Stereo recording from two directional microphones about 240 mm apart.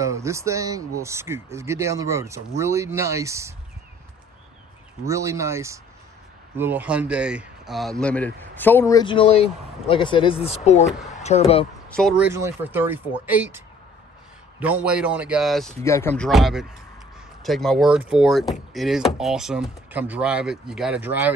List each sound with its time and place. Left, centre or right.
0.0 s speech: centre
5.0 s speech: centre; by 11.6 s left
11.9 s speech: centre
14.6 s speech: centre
15.8 s speech: centre